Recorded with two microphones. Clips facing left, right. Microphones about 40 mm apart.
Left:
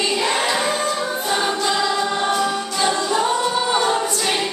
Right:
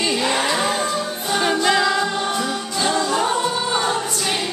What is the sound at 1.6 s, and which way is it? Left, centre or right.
Choir, right.